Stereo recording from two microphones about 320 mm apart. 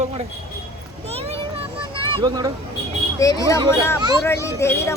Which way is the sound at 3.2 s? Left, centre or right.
Centre.